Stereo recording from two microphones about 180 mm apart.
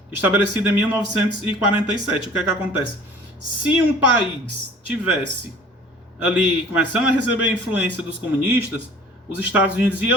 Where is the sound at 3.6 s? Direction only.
10° right (ahead or behind).